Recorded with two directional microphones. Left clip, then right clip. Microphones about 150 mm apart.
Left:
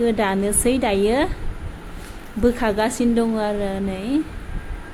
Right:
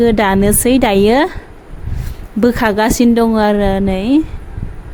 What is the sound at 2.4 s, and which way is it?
A woman's voice, 65° right (ahead or behind).